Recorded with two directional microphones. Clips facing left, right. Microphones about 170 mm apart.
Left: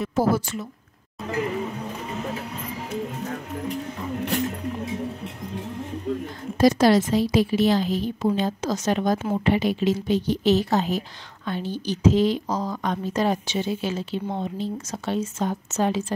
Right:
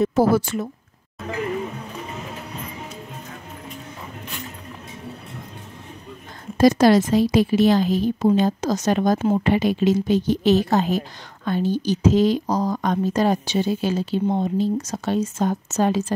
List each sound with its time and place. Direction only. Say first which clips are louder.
0.1 s a woman's voice: right 4 dB; 75° right (ahead or behind)
6.6 s a woman's voice: right 3 dB; 45° right (ahead or behind)